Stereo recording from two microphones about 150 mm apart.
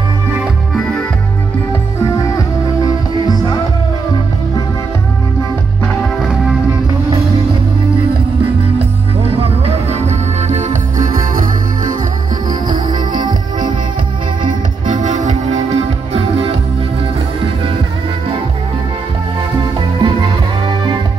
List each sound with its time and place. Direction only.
2.3 s music: 25° left (ahead or behind)
8.7 s music: 40° right (ahead or behind); by 11.9 s 60° right (ahead or behind)
12.6 s music: 30° right (ahead or behind)
14.9 s music: 55° right (ahead or behind)
20.0 s music: 30° right (ahead or behind)